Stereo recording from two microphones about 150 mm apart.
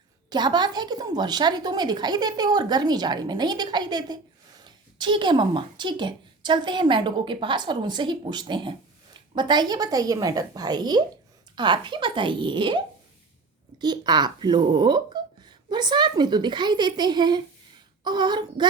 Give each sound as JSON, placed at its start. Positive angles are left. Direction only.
{"t": 0.3, "sound": "a woman's voice", "side_deg": -30}
{"t": 13.8, "sound": "a woman's voice", "side_deg": -30}